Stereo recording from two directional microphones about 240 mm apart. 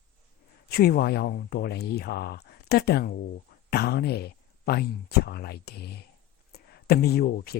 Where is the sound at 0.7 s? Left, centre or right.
Left.